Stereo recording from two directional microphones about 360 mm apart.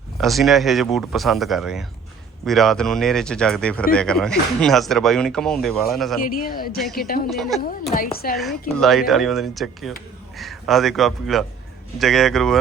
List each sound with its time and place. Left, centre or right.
0.2 s speech: centre
6.2 s speech: left
7.3 s speech: centre
7.6 s speech: left
8.8 s speech: centre